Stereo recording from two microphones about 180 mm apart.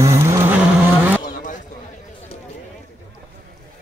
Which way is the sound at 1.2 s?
45° left (ahead or behind).